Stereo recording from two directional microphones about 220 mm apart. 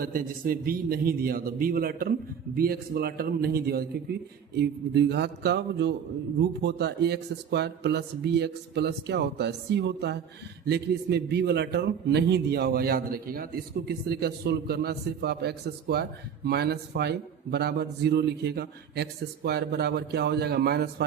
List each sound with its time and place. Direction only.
0.0 s a man's voice: 40° right (ahead or behind)